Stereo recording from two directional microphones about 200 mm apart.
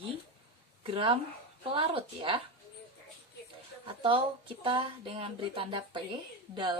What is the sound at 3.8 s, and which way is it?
Speech, 25° right (ahead or behind).